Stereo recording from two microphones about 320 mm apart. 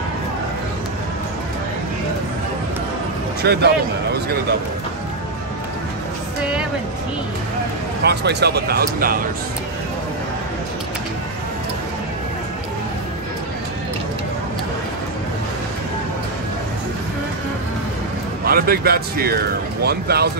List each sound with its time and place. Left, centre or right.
3.4 s speech: right
8.0 s speech: right
18.4 s speech: right